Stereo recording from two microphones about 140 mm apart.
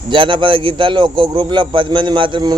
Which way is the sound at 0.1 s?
35° right (ahead or behind).